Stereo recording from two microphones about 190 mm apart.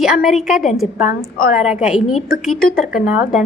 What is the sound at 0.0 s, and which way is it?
A woman's voice, 5° right (ahead or behind).